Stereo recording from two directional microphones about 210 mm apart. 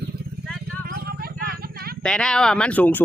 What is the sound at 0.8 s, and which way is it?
Clip-clop, 50° right (ahead or behind).